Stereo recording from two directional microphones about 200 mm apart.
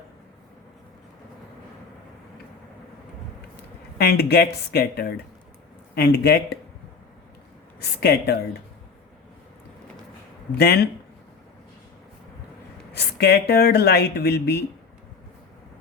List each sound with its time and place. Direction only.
3.9 s speech: 55° left (ahead or behind)
7.8 s speech: 55° left (ahead or behind)
10.5 s speech: 55° left (ahead or behind)
12.9 s speech: 55° left (ahead or behind)